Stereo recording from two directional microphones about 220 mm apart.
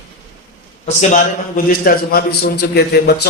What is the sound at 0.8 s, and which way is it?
A man's voice, 40° left (ahead or behind).